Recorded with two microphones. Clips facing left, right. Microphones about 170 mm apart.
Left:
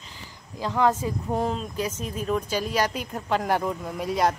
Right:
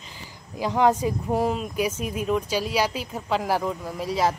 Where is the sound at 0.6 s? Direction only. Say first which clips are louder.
Right 2 dB; 15° right (ahead or behind).